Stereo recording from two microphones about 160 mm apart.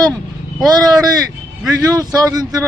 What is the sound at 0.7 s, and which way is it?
A man's voice, 25° right (ahead or behind).